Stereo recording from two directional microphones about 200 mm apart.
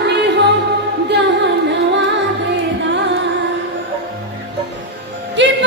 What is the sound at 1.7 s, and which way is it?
Music, 60° right (ahead or behind).